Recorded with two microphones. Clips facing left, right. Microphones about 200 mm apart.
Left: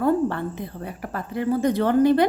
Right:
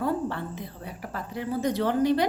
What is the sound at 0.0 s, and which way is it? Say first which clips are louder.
A woman's voice: left 7 dB; 55° left (ahead or behind).